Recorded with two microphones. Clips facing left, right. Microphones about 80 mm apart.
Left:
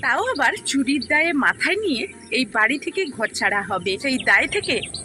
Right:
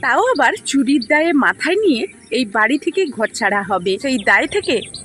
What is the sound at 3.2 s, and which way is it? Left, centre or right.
Speech, right.